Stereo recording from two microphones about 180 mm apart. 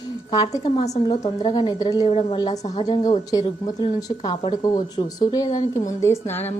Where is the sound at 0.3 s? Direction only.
20° left (ahead or behind).